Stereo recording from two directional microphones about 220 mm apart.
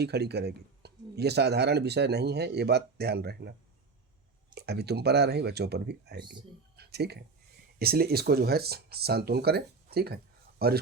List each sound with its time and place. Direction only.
0.0 s speech: 50° right (ahead or behind)
4.5 s speech: 45° right (ahead or behind)
6.7 s a sound: 50° right (ahead or behind)
7.8 s speech: 45° right (ahead or behind)